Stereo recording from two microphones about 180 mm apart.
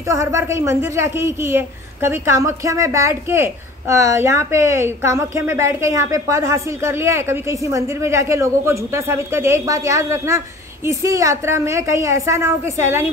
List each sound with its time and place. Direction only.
0.1 s a woman's voice: 15° right (ahead or behind)